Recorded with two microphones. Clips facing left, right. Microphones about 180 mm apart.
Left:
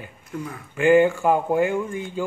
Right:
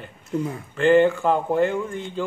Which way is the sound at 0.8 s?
10° left (ahead or behind).